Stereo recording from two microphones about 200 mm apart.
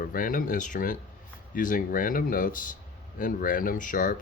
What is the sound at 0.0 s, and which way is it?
Speech, 45° left (ahead or behind).